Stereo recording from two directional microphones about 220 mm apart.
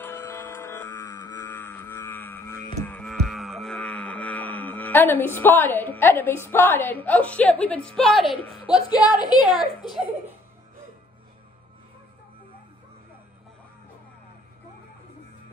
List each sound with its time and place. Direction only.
0.0 s a sound: 10° left (ahead or behind)
8.6 s speech: 5° right (ahead or behind)
9.2 s a woman's voice: 20° left (ahead or behind)